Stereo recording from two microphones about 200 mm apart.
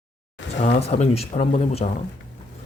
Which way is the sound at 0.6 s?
30° left (ahead or behind).